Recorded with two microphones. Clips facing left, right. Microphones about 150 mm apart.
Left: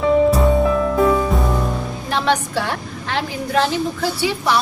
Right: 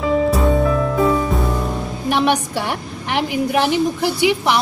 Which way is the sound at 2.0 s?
15° right (ahead or behind).